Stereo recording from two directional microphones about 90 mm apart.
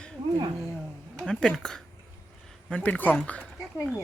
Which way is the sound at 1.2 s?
10° left (ahead or behind).